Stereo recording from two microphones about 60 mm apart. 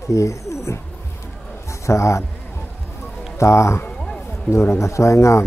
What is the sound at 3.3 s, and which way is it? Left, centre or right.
A man's voice, left.